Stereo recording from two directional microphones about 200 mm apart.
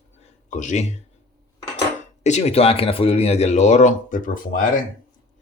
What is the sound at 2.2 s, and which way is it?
A man's voice, 35° left (ahead or behind).